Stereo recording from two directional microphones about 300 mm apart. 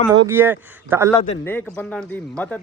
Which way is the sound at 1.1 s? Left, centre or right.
Centre.